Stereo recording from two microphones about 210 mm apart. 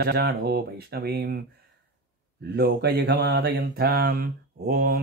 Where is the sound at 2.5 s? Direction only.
50° right (ahead or behind).